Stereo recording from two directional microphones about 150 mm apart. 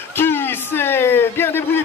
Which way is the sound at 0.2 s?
15° left (ahead or behind).